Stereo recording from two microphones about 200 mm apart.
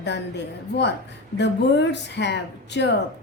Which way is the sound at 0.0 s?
60° left (ahead or behind).